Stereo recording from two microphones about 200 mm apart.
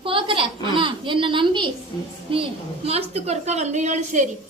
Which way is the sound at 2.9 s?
30° right (ahead or behind).